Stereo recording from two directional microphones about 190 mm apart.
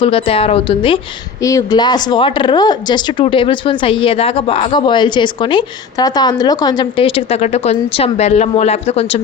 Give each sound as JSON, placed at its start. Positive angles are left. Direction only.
{"t": 0.0, "sound": "speech", "side_deg": 30}
{"t": 1.4, "sound": "speech", "side_deg": 15}